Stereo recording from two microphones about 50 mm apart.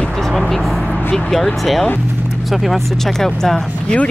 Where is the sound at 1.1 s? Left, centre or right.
Centre.